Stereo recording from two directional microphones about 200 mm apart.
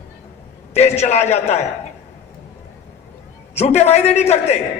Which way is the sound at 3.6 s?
35° left (ahead or behind).